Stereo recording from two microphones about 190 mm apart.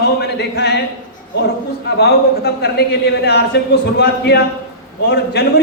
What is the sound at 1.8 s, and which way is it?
A man's voice, 55° left (ahead or behind).